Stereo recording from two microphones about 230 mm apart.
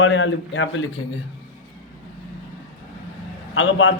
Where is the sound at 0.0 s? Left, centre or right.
Left.